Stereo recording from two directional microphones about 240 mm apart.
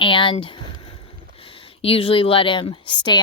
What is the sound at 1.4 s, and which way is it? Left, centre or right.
Speech, left.